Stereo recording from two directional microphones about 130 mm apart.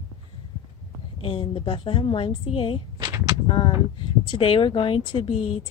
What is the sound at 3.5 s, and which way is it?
A woman's voice, 40° left (ahead or behind).